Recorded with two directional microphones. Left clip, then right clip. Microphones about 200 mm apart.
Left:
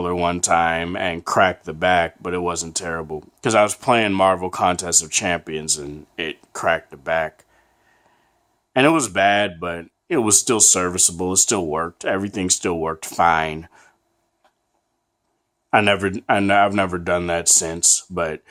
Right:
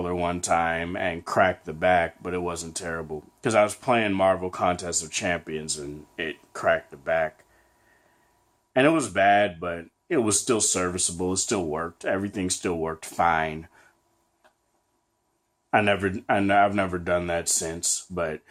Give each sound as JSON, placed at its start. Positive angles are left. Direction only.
{"t": 0.0, "sound": "speech", "side_deg": 35}
{"t": 8.7, "sound": "speech", "side_deg": 35}
{"t": 15.7, "sound": "speech", "side_deg": 40}